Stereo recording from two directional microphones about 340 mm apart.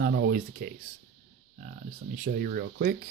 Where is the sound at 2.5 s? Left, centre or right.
Right.